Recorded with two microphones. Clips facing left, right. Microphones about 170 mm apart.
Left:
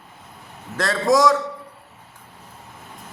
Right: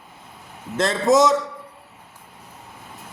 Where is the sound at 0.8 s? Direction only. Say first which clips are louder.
Right 1 dB; 25° right (ahead or behind).